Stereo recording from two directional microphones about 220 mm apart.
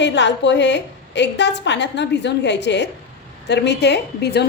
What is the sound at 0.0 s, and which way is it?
A woman's voice, 55° left (ahead or behind).